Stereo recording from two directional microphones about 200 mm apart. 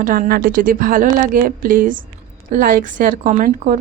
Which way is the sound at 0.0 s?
45° right (ahead or behind).